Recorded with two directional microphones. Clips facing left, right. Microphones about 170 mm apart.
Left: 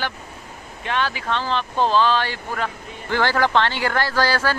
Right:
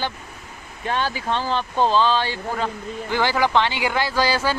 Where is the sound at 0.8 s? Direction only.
40° right (ahead or behind).